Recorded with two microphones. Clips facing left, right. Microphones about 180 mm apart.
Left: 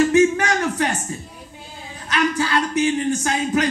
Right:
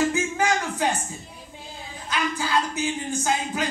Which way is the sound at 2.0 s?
80° left.